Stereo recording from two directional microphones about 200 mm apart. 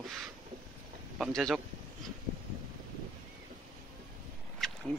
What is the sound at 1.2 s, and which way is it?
Speech, centre (ahead or behind).